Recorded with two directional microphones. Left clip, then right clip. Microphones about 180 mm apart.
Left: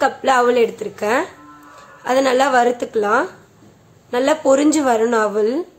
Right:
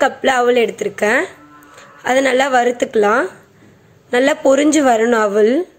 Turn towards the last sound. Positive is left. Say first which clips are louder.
# right 4 dB
turn(degrees=-20)  # may be behind; listen again after turning